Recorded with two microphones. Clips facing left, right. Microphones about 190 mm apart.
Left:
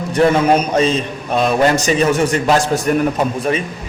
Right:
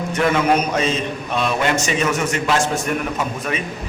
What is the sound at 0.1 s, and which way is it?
A man's voice, 35° left (ahead or behind).